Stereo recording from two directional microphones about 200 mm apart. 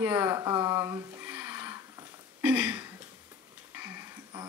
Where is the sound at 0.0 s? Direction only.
10° right (ahead or behind).